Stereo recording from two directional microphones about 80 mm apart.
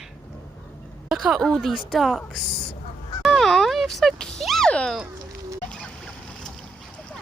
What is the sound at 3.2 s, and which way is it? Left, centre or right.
Speech, centre.